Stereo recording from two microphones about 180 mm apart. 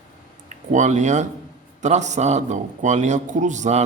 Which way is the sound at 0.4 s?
40° right (ahead or behind).